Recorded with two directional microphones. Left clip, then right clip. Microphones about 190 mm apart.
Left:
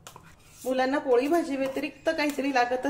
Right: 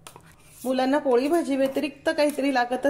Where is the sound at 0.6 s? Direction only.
35° right (ahead or behind).